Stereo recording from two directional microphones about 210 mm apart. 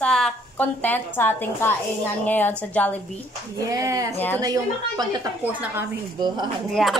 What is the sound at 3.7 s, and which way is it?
Speech, 15° right (ahead or behind).